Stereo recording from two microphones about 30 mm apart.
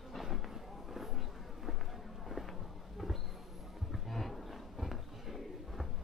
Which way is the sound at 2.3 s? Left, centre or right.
Centre.